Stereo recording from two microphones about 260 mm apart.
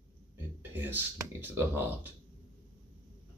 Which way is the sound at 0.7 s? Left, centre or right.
Centre.